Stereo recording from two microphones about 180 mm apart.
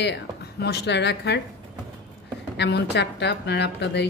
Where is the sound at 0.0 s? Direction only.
70° left (ahead or behind).